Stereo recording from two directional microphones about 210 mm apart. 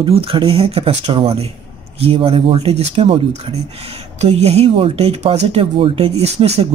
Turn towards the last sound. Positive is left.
turn(degrees=-30)  # may be behind; listen again after turning